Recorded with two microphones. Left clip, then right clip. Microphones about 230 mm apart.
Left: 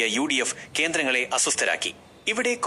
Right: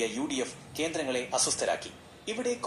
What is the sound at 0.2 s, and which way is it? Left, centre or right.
Speech, left.